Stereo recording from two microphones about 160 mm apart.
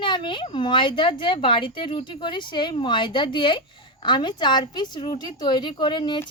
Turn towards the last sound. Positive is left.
turn(degrees=30)  # may be behind; listen again after turning